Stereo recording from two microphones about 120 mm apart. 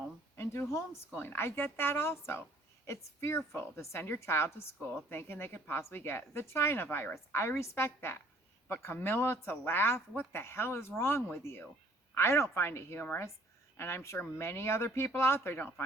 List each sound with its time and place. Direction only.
0.3 s speech: 20° left (ahead or behind)